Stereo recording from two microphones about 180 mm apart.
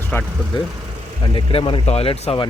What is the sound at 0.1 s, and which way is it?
Speech, 10° left (ahead or behind).